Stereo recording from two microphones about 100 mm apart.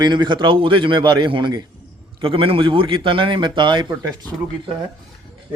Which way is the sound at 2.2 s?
65° right (ahead or behind).